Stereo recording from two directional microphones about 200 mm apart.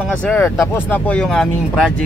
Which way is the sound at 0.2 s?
10° left (ahead or behind).